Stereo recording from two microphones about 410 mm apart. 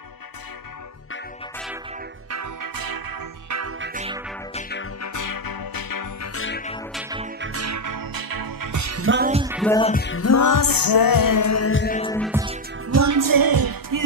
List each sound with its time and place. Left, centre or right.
2.3 s organ: right
3.8 s music: centre
4.6 s music: left
5.0 s music: left
6.2 s music: left
6.9 s music: centre
7.3 s music: right
9.3 s music: centre
9.6 s music: centre
10.0 s music: left
12.0 s music: centre
12.3 s music: centre
12.8 s music: right